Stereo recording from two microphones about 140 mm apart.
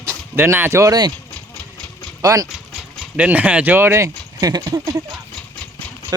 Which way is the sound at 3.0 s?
10° right (ahead or behind).